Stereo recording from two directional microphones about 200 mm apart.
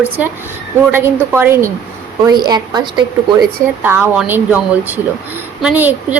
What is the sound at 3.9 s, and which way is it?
Speech, 10° right (ahead or behind).